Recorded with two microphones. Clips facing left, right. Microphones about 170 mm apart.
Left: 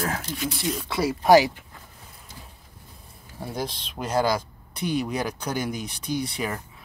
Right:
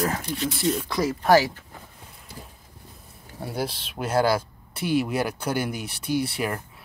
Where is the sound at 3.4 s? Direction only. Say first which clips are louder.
Right 2 dB; 10° right (ahead or behind).